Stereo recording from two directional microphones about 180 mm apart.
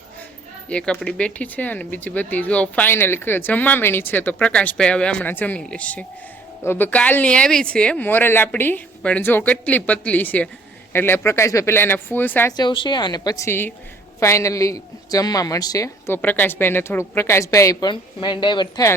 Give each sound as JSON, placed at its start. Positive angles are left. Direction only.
{"t": 0.7, "sound": "speech", "side_deg": 5}
{"t": 12.5, "sound": "a woman's voice", "side_deg": 25}